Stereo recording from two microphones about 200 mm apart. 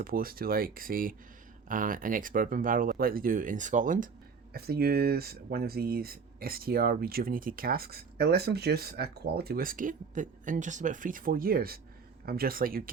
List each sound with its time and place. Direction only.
0.0 s speech: 45° right (ahead or behind)
4.5 s speech: 50° right (ahead or behind)